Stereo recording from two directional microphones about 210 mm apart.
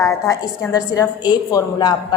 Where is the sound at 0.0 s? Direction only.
15° left (ahead or behind).